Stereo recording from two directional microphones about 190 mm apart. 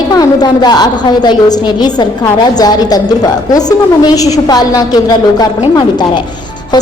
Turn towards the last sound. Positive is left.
turn(degrees=20)  # may be behind; listen again after turning